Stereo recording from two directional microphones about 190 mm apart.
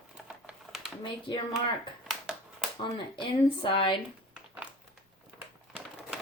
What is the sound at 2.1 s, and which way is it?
Finger snapping, 5° right (ahead or behind).